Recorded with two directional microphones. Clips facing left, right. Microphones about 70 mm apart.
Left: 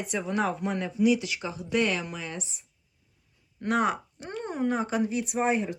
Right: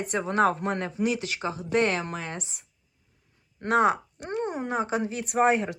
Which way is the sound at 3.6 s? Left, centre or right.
Right.